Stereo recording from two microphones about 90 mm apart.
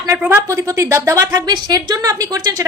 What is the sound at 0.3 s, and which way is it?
A woman's voice, 30° right (ahead or behind).